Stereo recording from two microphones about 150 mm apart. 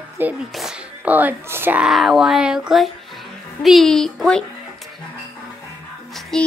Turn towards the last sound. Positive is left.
turn(degrees=5)  # may be behind; listen again after turning